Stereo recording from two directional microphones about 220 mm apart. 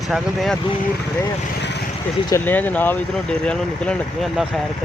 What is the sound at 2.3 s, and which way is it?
Speech, 10° left (ahead or behind).